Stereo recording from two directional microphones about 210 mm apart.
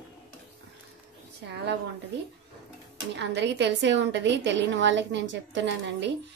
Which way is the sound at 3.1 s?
55° right (ahead or behind).